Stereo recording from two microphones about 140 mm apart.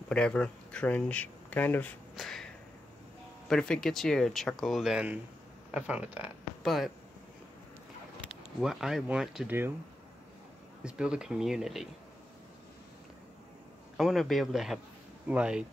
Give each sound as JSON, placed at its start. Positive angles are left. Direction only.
{"t": 0.1, "sound": "speech", "side_deg": 5}
{"t": 2.1, "sound": "a sound", "side_deg": 5}
{"t": 3.4, "sound": "speech", "side_deg": 5}
{"t": 8.3, "sound": "speech", "side_deg": -5}
{"t": 10.8, "sound": "speech", "side_deg": -5}
{"t": 13.9, "sound": "speech", "side_deg": 0}